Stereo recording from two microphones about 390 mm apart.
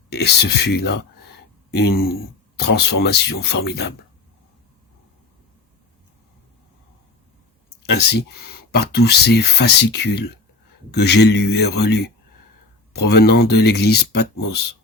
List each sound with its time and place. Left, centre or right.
0.1 s speech: left
8.7 s speech: left